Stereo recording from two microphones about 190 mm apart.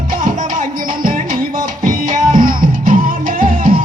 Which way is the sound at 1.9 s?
45° right (ahead or behind).